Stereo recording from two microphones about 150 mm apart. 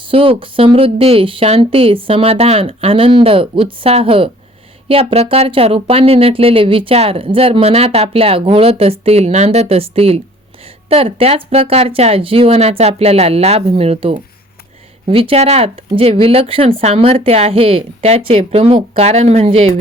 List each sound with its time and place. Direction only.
0.1 s speech: 35° right (ahead or behind)